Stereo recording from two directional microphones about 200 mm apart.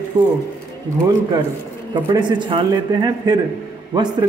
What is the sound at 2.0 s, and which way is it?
Speech, 25° right (ahead or behind).